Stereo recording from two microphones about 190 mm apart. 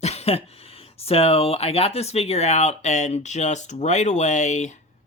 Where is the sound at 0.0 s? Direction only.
35° left (ahead or behind).